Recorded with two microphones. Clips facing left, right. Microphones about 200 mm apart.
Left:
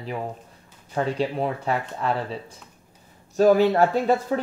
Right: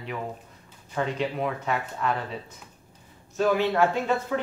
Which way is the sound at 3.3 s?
40° left (ahead or behind).